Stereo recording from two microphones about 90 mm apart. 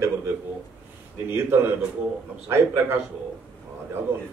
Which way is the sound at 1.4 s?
25° right (ahead or behind).